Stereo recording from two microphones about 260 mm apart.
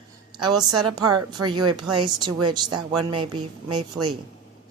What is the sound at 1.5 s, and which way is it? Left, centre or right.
Speech, right.